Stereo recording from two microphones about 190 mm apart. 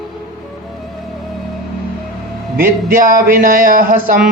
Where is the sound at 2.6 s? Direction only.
50° right (ahead or behind).